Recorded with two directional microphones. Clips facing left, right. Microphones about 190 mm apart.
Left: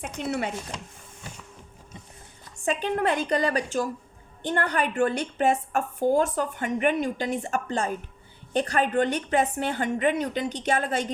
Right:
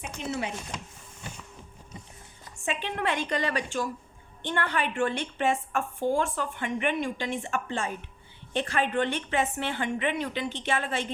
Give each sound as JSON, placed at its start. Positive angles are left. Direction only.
{"t": 0.0, "sound": "speech", "side_deg": 60}
{"t": 2.6, "sound": "a woman's voice", "side_deg": 40}